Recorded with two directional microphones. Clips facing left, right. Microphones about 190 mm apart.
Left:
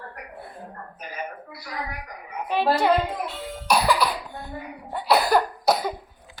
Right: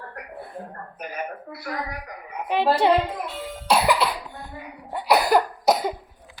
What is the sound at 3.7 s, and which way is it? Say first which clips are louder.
Cough: right 1 dB; 25° right (ahead or behind).